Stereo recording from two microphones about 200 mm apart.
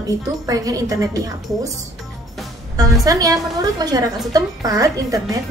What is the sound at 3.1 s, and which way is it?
A woman's voice, 15° right (ahead or behind).